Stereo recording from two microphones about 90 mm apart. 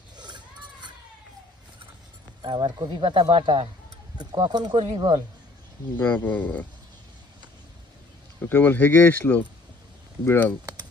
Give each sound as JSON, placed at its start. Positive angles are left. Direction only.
{"t": 0.2, "sound": "a sound", "side_deg": -55}
{"t": 2.4, "sound": "speech", "side_deg": -55}
{"t": 3.0, "sound": "speech", "side_deg": -75}
{"t": 4.2, "sound": "speech", "side_deg": -55}
{"t": 5.9, "sound": "speech", "side_deg": 15}
{"t": 8.4, "sound": "speech", "side_deg": 20}